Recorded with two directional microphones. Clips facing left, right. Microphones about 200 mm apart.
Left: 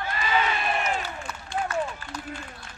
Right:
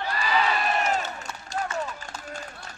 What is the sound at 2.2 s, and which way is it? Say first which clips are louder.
Run: even; 45° right (ahead or behind).